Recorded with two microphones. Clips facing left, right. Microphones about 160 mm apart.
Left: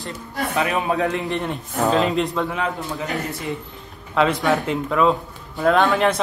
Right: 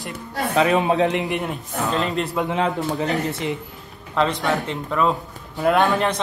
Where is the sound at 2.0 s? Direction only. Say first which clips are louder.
Left 3 dB; centre (ahead or behind).